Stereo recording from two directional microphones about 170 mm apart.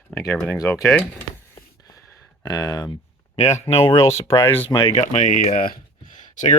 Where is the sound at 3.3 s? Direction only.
40° left (ahead or behind).